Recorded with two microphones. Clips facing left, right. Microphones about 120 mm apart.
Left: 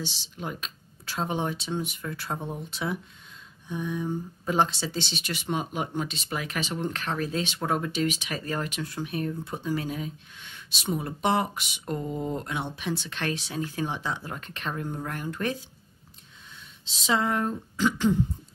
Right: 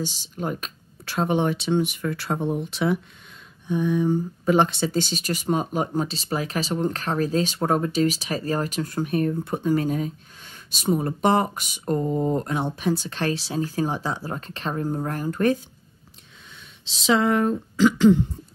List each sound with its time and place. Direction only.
0.0 s speech: 45° right (ahead or behind)
16.8 s speech: 90° right